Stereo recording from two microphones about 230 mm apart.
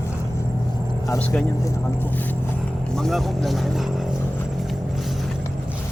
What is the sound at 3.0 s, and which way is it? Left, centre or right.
Speech, centre.